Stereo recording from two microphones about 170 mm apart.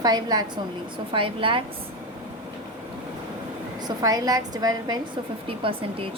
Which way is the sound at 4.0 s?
20° right (ahead or behind).